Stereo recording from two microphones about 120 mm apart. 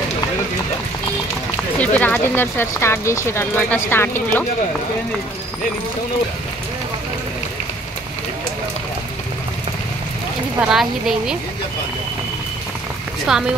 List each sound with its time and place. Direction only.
1.8 s speech: 15° left (ahead or behind)
10.6 s a woman's voice: 5° right (ahead or behind)
13.3 s a woman's voice: 5° right (ahead or behind)